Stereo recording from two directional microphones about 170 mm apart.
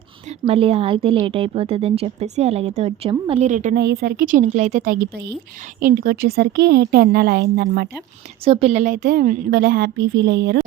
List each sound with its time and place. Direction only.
0.4 s a woman's voice: 35° right (ahead or behind)
3.8 s a woman's voice: 70° right (ahead or behind)
8.4 s a woman's voice: 35° right (ahead or behind); by 10.6 s 90° right